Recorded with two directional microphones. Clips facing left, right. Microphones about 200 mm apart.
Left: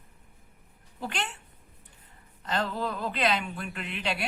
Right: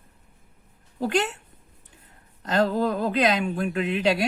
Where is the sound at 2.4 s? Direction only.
40° right (ahead or behind).